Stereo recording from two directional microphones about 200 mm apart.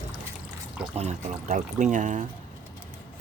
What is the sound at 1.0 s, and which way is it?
Speech, 35° right (ahead or behind).